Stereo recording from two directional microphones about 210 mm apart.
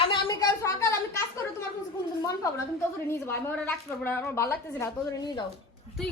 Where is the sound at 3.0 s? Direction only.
10° left (ahead or behind).